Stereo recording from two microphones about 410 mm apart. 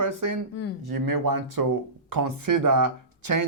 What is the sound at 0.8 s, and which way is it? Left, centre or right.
Speech, right.